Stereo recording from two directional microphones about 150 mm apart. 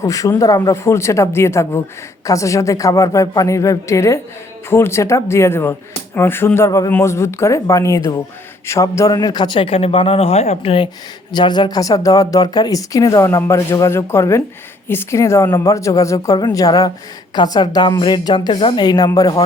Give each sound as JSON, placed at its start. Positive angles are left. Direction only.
{"t": 0.0, "sound": "a man's voice", "side_deg": 20}
{"t": 11.3, "sound": "speech", "side_deg": 30}